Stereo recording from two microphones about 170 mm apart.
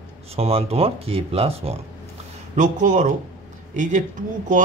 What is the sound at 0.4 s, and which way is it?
Speech, 35° right (ahead or behind).